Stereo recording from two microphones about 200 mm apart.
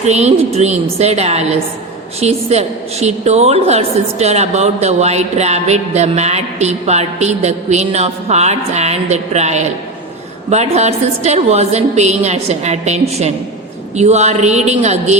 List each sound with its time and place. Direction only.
0.0 s a woman's voice: 35° right (ahead or behind)